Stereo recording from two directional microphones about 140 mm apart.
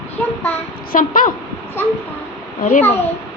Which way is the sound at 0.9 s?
70° left (ahead or behind).